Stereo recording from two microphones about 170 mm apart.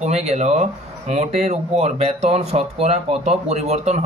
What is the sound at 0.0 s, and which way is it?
Speech, 40° right (ahead or behind).